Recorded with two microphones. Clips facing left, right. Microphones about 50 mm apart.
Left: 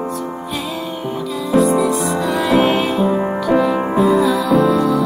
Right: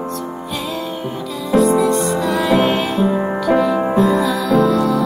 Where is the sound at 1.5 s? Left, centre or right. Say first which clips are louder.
Right 1 dB; centre.